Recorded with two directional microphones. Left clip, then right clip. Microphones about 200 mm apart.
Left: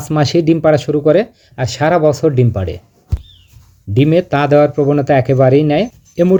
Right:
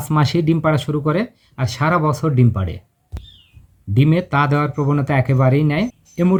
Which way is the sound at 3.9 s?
30° left (ahead or behind).